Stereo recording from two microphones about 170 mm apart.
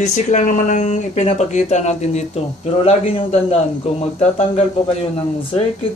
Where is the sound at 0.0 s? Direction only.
45° left (ahead or behind).